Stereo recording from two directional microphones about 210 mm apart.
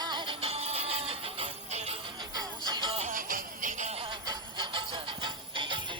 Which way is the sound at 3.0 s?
40° right (ahead or behind).